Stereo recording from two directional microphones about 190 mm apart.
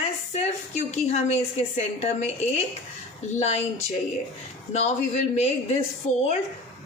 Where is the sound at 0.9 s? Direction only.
35° left (ahead or behind).